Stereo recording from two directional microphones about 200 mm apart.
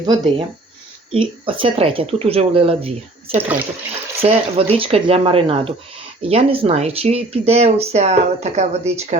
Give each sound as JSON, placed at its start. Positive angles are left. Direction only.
{"t": 0.0, "sound": "speech", "side_deg": -20}
{"t": 3.3, "sound": "speech", "side_deg": -10}
{"t": 4.2, "sound": "speech", "side_deg": -30}